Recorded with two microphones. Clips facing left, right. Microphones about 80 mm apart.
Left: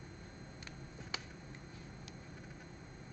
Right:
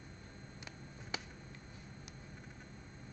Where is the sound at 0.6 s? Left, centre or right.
Centre.